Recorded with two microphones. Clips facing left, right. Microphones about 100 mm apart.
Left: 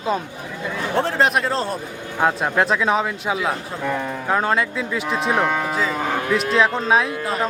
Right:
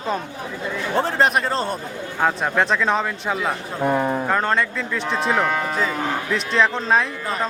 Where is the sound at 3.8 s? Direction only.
35° right (ahead or behind).